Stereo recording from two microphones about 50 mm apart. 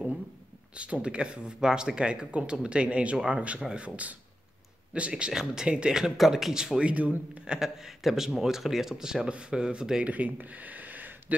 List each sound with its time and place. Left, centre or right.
0.7 s speech: right
6.1 s speech: centre
6.9 s speech: right
7.5 s speech: centre
10.0 s speech: right